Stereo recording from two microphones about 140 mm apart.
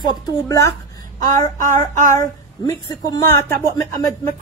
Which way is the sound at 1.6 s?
65° right (ahead or behind).